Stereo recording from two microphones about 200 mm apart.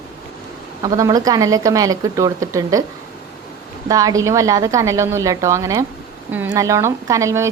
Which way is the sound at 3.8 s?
15° right (ahead or behind).